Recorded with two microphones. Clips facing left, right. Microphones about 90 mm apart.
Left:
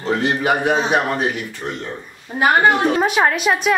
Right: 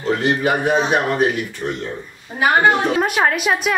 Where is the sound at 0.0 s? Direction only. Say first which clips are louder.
Right 1 dB; 20° left (ahead or behind).